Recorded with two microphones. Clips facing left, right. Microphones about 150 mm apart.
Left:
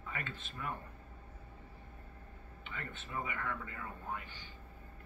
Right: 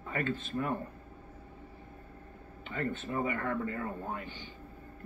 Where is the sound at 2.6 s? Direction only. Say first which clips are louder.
Right 12 dB; 40° right (ahead or behind).